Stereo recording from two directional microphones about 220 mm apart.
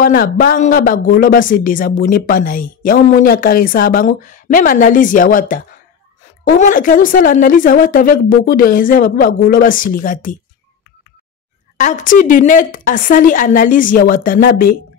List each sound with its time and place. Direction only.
0.0 s speech: 40° left (ahead or behind)
11.7 s speech: 35° left (ahead or behind)